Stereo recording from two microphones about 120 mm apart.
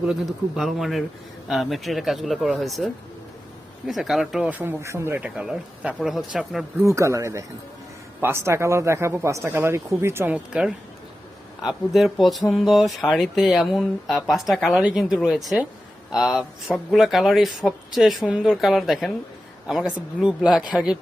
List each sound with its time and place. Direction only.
0.0 s speech: 5° right (ahead or behind); by 5.3 s 20° right (ahead or behind)
5.4 s speech: 5° right (ahead or behind)
6.8 s speech: 25° right (ahead or behind); by 21.0 s 10° right (ahead or behind)